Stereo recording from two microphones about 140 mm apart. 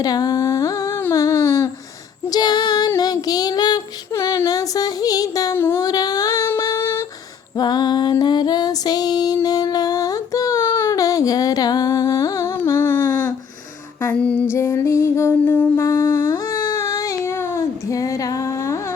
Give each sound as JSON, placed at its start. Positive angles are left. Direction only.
{"t": 0.0, "sound": "humming", "side_deg": 25}
{"t": 1.1, "sound": "a sound", "side_deg": 25}
{"t": 2.3, "sound": "child singing", "side_deg": 30}
{"t": 5.8, "sound": "a sound", "side_deg": 30}
{"t": 6.6, "sound": "humming", "side_deg": 25}
{"t": 7.5, "sound": "female singing", "side_deg": 30}
{"t": 12.5, "sound": "music", "side_deg": 20}
{"t": 14.0, "sound": "female singing", "side_deg": 10}
{"t": 14.5, "sound": "music", "side_deg": 20}
{"t": 15.8, "sound": "humming", "side_deg": 25}